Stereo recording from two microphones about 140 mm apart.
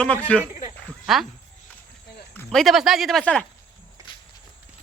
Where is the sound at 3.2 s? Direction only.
10° left (ahead or behind).